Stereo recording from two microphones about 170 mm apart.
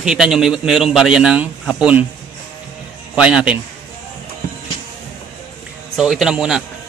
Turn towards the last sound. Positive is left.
turn(degrees=-5)  # may be behind; listen again after turning